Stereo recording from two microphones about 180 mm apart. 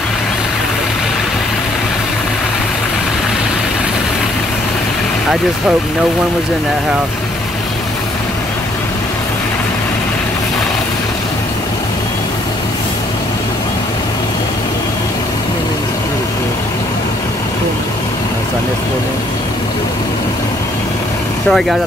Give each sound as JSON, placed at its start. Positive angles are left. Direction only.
{"t": 21.5, "sound": "speech", "side_deg": 0}